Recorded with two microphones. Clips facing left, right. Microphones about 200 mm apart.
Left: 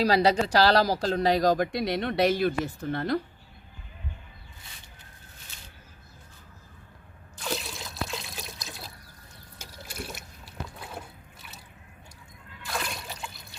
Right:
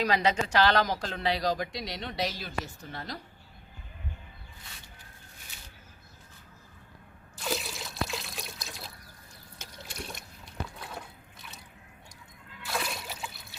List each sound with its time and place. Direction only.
0.0 s speech: 35° left (ahead or behind); by 3.2 s 60° left (ahead or behind)
7.3 s water: centre (ahead or behind)
12.6 s water: centre (ahead or behind)